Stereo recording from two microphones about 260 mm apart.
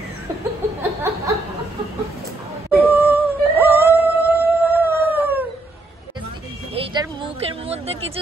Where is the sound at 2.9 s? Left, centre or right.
Centre.